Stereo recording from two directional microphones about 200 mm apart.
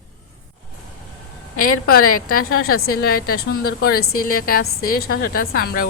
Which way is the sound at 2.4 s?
50° left (ahead or behind).